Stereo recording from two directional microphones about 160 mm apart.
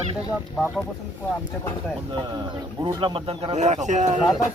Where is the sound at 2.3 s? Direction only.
30° right (ahead or behind); by 4.2 s 50° right (ahead or behind).